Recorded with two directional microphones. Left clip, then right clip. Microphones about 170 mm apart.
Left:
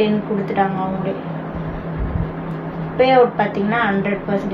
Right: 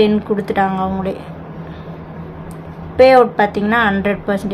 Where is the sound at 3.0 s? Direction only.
45° right (ahead or behind).